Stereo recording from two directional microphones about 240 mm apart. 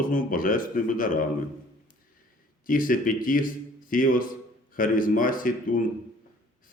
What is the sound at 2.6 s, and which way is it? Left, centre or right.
A man's voice, left.